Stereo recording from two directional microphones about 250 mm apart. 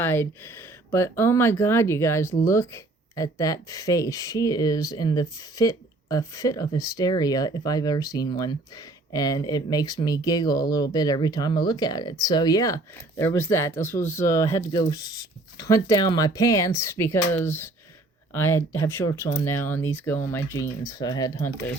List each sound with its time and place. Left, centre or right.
0.0 s speech: centre